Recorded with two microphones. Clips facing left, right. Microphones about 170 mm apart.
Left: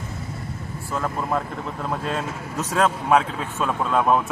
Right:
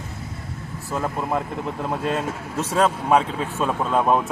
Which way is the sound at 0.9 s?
15° right (ahead or behind).